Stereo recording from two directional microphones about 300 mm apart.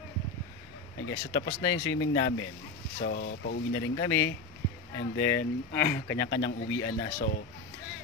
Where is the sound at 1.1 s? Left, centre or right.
Left.